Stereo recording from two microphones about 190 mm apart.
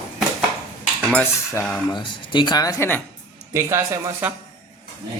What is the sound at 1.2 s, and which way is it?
Speech, 15° left (ahead or behind).